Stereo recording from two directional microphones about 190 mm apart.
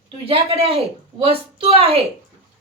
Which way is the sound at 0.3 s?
30° right (ahead or behind).